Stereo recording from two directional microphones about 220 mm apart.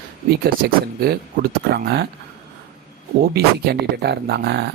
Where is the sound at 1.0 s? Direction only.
45° right (ahead or behind).